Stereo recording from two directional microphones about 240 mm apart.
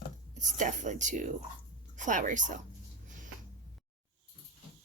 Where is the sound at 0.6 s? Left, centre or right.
Right.